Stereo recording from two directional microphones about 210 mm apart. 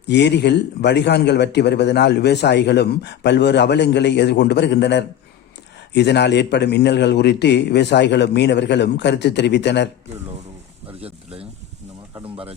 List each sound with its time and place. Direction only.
0.1 s a man's voice: 55° left (ahead or behind)
11.0 s speech: 30° right (ahead or behind)